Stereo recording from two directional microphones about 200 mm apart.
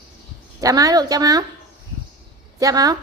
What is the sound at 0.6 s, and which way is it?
Speech, 15° right (ahead or behind).